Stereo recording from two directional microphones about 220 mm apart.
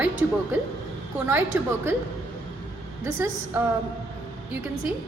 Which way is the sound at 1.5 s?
10° right (ahead or behind).